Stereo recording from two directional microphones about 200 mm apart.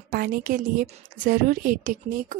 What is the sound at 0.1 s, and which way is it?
Speech, 45° right (ahead or behind).